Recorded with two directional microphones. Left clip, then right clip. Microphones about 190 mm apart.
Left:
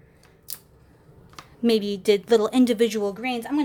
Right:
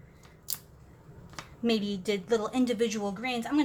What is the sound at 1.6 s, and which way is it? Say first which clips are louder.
A woman's voice: left 9 dB; 45° left (ahead or behind).